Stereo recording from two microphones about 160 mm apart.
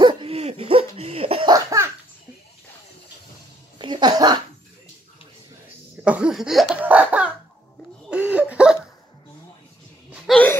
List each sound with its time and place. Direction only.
0.0 s cough: 35° right (ahead or behind)
1.5 s laughter: 20° right (ahead or behind)
3.7 s music: 30° right (ahead or behind)
6.0 s laughter: 5° right (ahead or behind)
8.1 s a sound: 10° right (ahead or behind)
10.2 s gasp: 5° left (ahead or behind)